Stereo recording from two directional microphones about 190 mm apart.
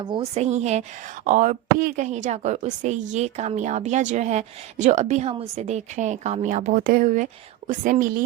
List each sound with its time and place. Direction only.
0.0 s a woman's voice: 25° right (ahead or behind); by 8.2 s 45° right (ahead or behind)